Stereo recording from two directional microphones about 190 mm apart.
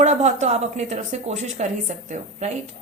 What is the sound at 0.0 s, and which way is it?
A woman's voice, 35° right (ahead or behind).